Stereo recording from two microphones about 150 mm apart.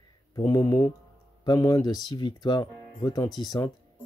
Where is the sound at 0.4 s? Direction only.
25° left (ahead or behind).